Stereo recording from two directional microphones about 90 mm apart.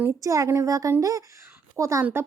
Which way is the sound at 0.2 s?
35° right (ahead or behind).